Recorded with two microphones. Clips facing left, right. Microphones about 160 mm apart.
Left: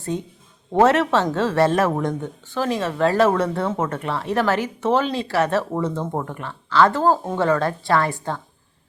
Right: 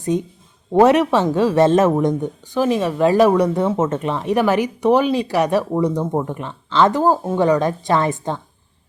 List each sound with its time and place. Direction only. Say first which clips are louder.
0.1 s a woman's voice: right 6 dB; 15° right (ahead or behind)